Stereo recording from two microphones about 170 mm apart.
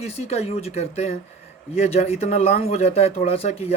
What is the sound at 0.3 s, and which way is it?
Speech, 35° left (ahead or behind).